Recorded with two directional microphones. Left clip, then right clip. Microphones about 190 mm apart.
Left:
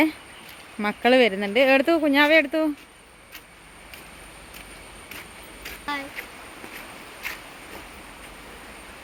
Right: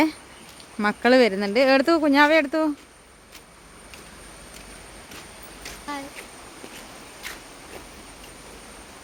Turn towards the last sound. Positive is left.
turn(degrees=20)  # may be behind; listen again after turning